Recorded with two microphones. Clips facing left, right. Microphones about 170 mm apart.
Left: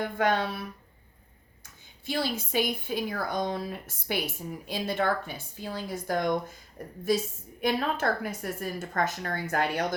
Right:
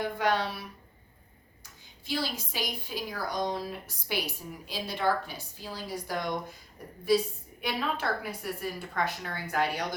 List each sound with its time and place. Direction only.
0.2 s a woman's voice: 50° left (ahead or behind)
2.0 s a woman's voice: 55° left (ahead or behind)